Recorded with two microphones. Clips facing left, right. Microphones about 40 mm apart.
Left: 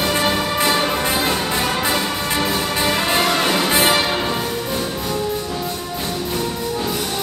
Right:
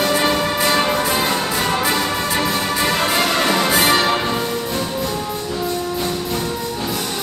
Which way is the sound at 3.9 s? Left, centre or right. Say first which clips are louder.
Right 2 dB; centre.